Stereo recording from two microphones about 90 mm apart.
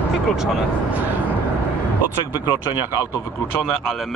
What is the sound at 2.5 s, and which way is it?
Speech, 50° left (ahead or behind).